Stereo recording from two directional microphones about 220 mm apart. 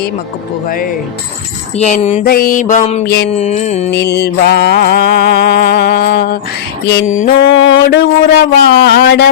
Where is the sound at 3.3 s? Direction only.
30° left (ahead or behind).